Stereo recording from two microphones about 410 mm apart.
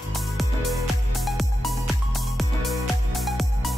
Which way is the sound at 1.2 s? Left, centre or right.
Centre.